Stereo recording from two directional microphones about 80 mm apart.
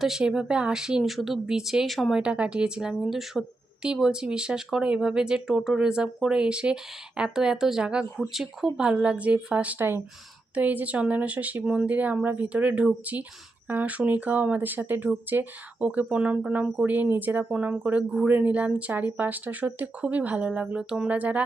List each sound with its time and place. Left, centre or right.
0.0 s speech: centre
2.2 s speech: centre
11.6 s speech: centre
11.9 s speech: centre